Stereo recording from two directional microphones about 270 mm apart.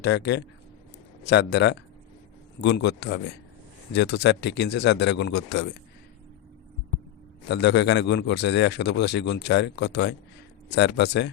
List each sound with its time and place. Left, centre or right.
0.0 s a man's voice: left
7.4 s a man's voice: left